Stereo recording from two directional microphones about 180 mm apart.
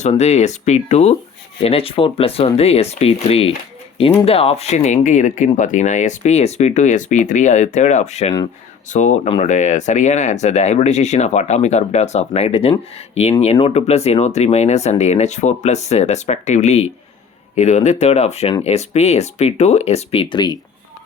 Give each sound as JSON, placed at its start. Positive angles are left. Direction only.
{"t": 0.0, "sound": "speech", "side_deg": 40}